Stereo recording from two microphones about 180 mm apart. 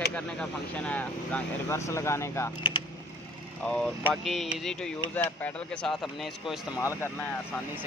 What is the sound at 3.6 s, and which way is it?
Speech, 5° left (ahead or behind).